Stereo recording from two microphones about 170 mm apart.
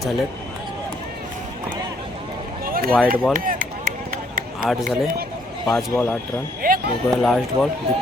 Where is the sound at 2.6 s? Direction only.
60° right (ahead or behind).